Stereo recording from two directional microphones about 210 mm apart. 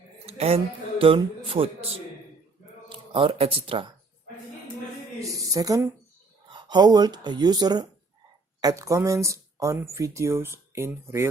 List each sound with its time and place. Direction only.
0.3 s speech: 30° right (ahead or behind)
2.9 s speech: 25° right (ahead or behind)
5.2 s speech: 15° right (ahead or behind)